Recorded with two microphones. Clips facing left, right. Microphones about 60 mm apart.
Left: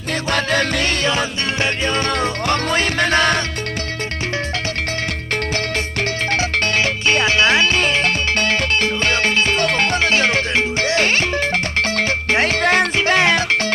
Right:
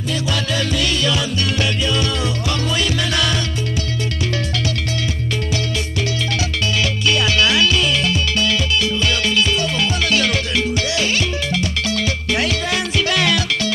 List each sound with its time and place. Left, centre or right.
0.1 s music: left
6.3 s music: left
10.0 s music: left
13.0 s music: left